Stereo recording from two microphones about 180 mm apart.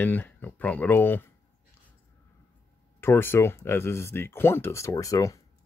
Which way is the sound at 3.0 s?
15° left (ahead or behind).